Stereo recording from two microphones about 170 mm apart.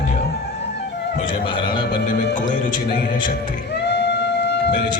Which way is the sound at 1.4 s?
30° left (ahead or behind).